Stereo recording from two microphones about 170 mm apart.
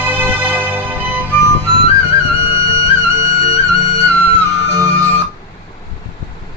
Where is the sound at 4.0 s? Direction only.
15° right (ahead or behind).